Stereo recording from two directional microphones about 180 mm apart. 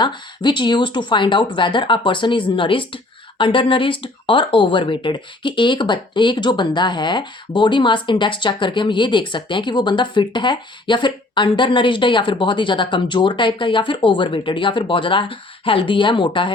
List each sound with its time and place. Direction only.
0.0 s speech: 25° left (ahead or behind)